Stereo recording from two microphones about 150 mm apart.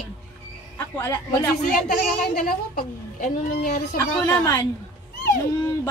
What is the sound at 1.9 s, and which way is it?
A woman's voice, 65° left (ahead or behind).